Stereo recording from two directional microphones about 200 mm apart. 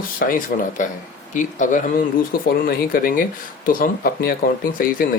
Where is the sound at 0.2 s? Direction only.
40° left (ahead or behind).